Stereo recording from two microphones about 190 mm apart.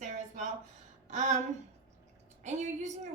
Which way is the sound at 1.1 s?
40° right (ahead or behind).